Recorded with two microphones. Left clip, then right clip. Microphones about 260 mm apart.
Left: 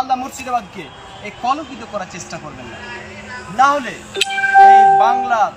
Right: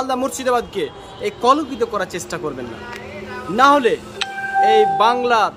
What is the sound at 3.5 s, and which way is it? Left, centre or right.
Speech, centre.